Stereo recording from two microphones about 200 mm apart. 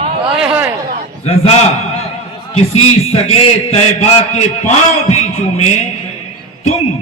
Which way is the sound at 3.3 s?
35° left (ahead or behind).